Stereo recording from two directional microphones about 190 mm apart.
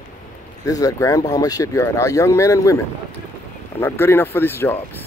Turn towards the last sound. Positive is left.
turn(degrees=10)  # may be behind; listen again after turning